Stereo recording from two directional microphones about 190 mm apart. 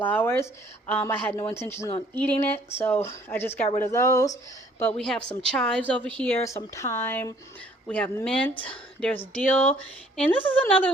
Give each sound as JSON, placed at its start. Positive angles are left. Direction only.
{"t": 0.0, "sound": "a woman's voice", "side_deg": 10}
{"t": 8.5, "sound": "a woman's voice", "side_deg": 25}
{"t": 9.0, "sound": "speech", "side_deg": 5}